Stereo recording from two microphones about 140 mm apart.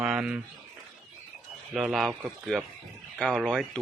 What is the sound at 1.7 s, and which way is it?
A man's voice, centre (ahead or behind).